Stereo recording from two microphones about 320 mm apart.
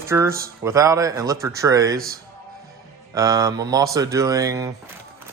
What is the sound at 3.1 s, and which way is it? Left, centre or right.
Speech, centre.